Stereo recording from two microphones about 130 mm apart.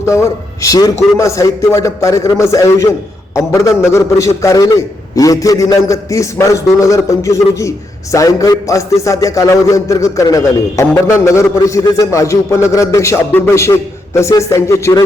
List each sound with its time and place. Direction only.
0.0 s a man's voice: 20° left (ahead or behind)